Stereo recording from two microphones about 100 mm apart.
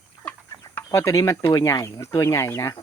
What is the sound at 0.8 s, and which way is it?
Chicken, 30° left (ahead or behind).